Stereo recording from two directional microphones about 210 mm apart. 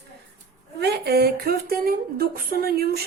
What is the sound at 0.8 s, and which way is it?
A woman's voice, 50° right (ahead or behind).